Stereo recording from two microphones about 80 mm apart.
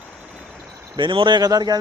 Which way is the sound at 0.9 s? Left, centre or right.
Right.